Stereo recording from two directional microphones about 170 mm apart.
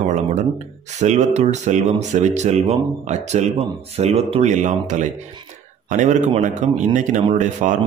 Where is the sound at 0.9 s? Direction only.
45° right (ahead or behind).